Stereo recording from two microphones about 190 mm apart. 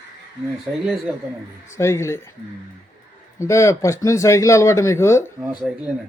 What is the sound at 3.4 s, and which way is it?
Speech, 15° left (ahead or behind).